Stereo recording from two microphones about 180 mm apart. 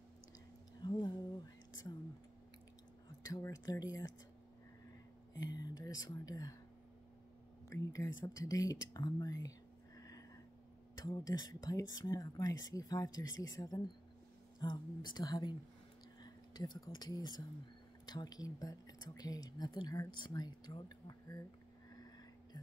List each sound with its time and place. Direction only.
0.8 s a sound: 25° left (ahead or behind)
3.3 s speech: 20° left (ahead or behind)
5.3 s speech: 20° left (ahead or behind)
7.7 s speech: 15° left (ahead or behind)